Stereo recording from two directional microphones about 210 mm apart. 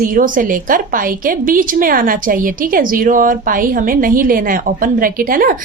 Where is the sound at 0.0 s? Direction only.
40° right (ahead or behind).